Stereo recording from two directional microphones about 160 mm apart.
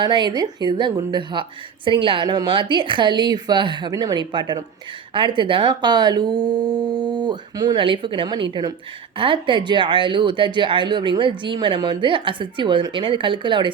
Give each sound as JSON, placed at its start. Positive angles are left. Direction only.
{"t": 0.0, "sound": "a woman's voice", "side_deg": -30}